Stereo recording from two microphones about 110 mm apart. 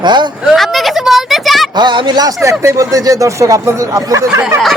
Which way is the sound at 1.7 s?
45° right (ahead or behind).